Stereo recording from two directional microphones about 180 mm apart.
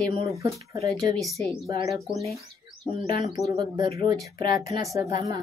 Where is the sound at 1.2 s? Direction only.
Centre (ahead or behind).